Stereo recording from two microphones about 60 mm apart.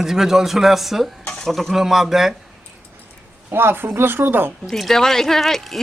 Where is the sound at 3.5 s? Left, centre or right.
Right.